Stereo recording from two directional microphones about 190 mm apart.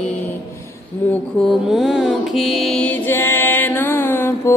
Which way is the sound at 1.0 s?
10° left (ahead or behind).